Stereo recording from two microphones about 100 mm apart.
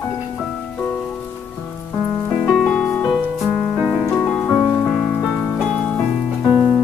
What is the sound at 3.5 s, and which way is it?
Music, 10° right (ahead or behind).